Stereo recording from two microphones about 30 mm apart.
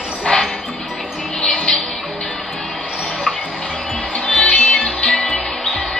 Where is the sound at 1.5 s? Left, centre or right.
Centre.